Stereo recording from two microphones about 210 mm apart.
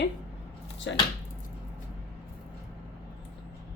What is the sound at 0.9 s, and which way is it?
Speech, 60° left (ahead or behind).